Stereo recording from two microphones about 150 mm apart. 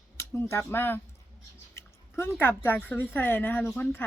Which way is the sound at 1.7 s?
15° left (ahead or behind).